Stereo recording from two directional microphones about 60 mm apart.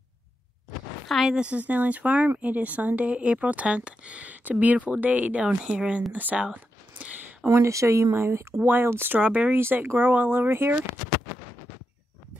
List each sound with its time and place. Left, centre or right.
1.0 s a sound: centre
1.3 s speech: centre
6.1 s speech: right
6.5 s a sound: right
7.6 s speech: right
8.1 s speech: right
9.2 s speech: right
9.6 s speech: right